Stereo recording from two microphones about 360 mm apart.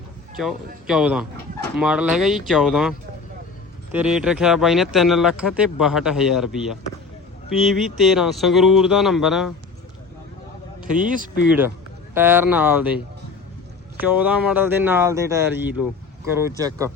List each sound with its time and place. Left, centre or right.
0.3 s speech: centre
3.9 s speech: centre
10.9 s speech: right
11.4 s speech: centre
13.9 s speech: centre